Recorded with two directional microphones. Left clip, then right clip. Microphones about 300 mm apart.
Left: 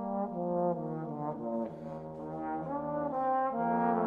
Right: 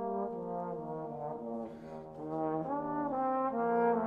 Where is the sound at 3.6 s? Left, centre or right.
Centre.